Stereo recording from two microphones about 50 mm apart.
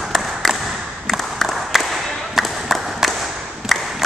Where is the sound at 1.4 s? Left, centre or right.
Centre.